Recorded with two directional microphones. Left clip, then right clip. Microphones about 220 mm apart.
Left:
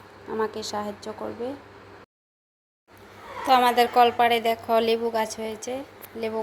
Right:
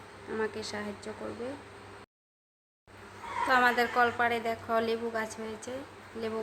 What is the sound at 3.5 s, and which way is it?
A woman's voice, 15° left (ahead or behind).